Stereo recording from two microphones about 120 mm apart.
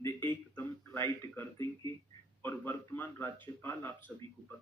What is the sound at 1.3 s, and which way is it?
A man's voice, 15° left (ahead or behind).